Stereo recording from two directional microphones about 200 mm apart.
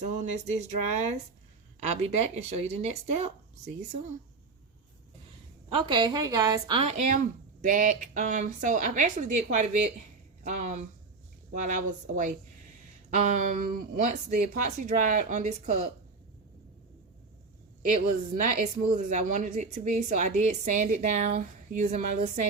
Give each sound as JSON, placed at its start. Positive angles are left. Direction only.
{"t": 0.0, "sound": "speech", "side_deg": -35}
{"t": 1.8, "sound": "speech", "side_deg": -35}
{"t": 5.6, "sound": "a woman's voice", "side_deg": -25}
{"t": 18.3, "sound": "speech", "side_deg": -40}